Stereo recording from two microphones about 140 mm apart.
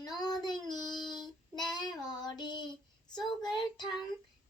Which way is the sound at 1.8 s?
30° left (ahead or behind).